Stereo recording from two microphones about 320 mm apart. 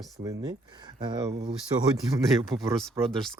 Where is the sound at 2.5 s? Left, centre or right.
Centre.